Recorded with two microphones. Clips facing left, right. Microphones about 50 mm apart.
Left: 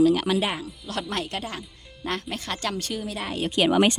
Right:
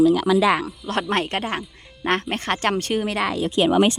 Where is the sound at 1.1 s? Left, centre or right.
Right.